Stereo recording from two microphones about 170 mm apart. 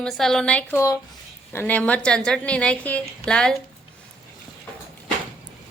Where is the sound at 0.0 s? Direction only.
5° left (ahead or behind).